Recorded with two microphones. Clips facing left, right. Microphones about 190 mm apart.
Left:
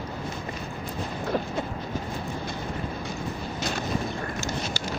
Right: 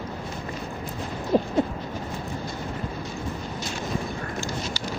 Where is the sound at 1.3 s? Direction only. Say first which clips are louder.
Right 8 dB; 35° right (ahead or behind).